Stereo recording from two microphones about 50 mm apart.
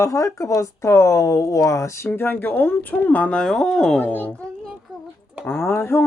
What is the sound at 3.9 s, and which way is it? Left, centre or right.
Speech, left.